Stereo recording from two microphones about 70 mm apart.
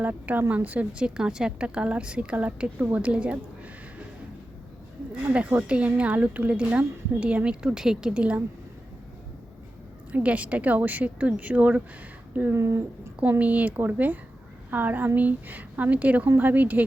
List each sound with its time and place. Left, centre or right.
0.0 s a woman's voice: right
5.3 s a woman's voice: right
10.1 s a woman's voice: centre
12.5 s speech: right
13.4 s a woman's voice: right